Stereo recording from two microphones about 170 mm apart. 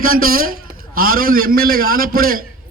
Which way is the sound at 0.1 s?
60° right (ahead or behind).